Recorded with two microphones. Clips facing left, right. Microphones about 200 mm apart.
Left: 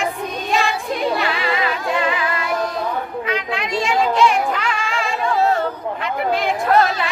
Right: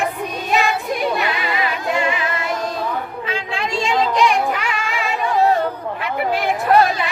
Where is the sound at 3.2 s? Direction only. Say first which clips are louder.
Left 1 dB; 30° right (ahead or behind).